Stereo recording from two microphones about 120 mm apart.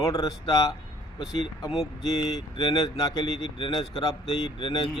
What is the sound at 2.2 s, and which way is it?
Speech, 40° left (ahead or behind).